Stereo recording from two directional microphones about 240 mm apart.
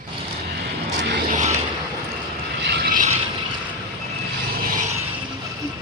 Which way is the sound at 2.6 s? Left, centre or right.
Right.